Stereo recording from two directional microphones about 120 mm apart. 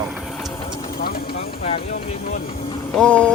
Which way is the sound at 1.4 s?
55° left (ahead or behind).